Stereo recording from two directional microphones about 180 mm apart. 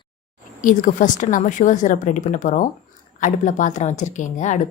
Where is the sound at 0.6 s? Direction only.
50° left (ahead or behind).